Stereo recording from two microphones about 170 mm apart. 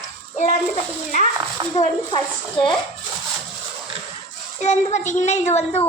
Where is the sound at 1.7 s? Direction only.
35° left (ahead or behind).